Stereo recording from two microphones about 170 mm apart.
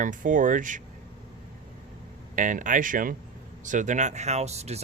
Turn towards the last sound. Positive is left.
turn(degrees=-40)  # may be behind; listen again after turning